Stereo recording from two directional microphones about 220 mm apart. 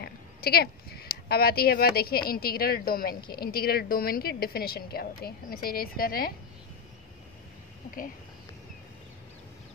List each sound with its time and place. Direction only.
0.0 s a woman's voice: 45° left (ahead or behind)